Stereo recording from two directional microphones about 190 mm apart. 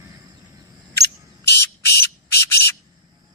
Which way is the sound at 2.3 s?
60° left (ahead or behind).